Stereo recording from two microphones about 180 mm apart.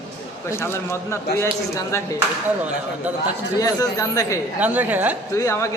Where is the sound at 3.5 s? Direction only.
20° left (ahead or behind).